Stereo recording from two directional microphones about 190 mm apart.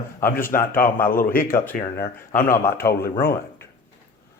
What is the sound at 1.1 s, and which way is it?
Speech, 50° left (ahead or behind).